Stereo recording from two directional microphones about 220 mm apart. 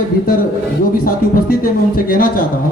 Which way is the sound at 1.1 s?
40° left (ahead or behind).